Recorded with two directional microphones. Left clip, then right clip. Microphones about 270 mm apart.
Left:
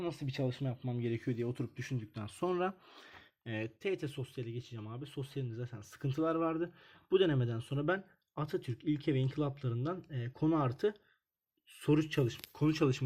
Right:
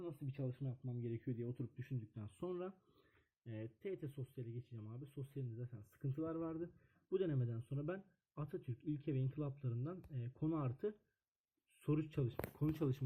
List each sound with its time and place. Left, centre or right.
0.0 s speech: centre